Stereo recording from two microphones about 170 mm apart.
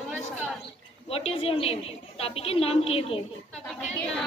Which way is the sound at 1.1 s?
35° left (ahead or behind).